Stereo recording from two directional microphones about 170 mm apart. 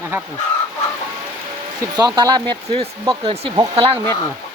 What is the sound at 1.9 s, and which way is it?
Speech, 20° right (ahead or behind).